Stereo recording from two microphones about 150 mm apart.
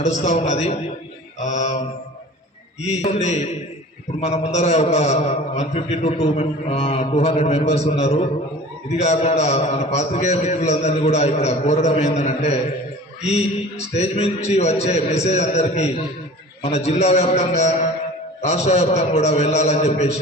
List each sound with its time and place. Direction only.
0.2 s a man's voice: 45° left (ahead or behind)
2.9 s a man's voice: 45° left (ahead or behind)
13.9 s a man's voice: 45° left (ahead or behind)